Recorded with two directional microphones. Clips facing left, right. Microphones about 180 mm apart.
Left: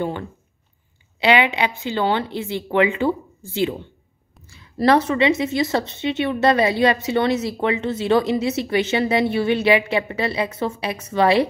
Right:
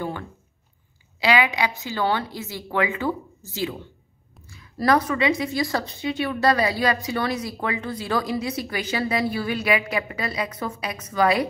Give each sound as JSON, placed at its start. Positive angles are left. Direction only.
{"t": 1.2, "sound": "speech", "side_deg": 25}
{"t": 4.6, "sound": "speech", "side_deg": 25}